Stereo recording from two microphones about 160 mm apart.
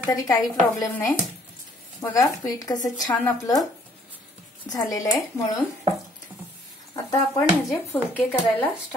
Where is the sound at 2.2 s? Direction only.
20° left (ahead or behind).